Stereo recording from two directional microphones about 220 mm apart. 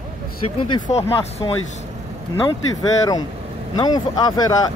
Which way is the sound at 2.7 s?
15° left (ahead or behind).